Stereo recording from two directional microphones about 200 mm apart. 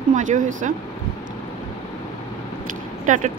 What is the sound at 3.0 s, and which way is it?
Speech, 40° right (ahead or behind).